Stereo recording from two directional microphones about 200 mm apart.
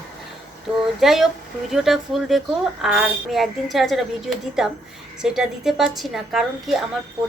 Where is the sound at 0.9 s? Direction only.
Centre (ahead or behind).